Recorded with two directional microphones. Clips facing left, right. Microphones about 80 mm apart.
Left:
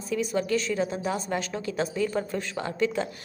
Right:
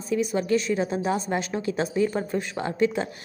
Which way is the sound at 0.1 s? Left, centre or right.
Centre.